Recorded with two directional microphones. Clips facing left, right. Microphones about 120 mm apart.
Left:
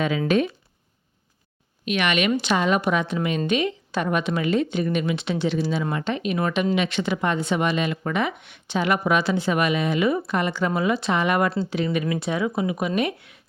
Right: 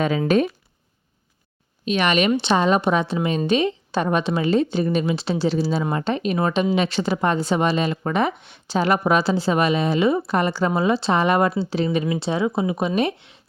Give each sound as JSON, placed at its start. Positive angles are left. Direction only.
{"t": 0.3, "sound": "speech", "side_deg": -40}
{"t": 1.8, "sound": "speech", "side_deg": -30}